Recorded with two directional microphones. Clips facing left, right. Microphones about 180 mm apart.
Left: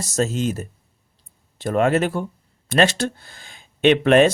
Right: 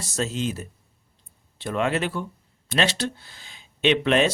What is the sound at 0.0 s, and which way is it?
Speech, 45° left (ahead or behind).